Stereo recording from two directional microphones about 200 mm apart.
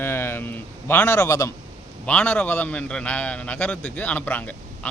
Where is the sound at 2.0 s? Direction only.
5° left (ahead or behind).